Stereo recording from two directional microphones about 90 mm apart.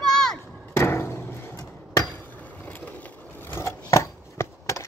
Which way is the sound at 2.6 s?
20° left (ahead or behind).